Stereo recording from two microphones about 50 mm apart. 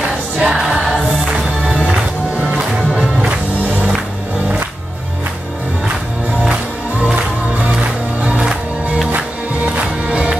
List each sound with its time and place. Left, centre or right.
0.4 s music: right
10.0 s music: centre